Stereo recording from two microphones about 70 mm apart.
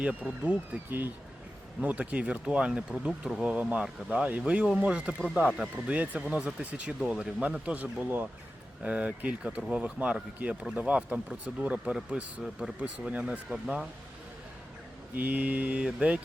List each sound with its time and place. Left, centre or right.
0.0 s speech: right
3.1 s speech: centre
3.4 s speech: centre
15.1 s speech: right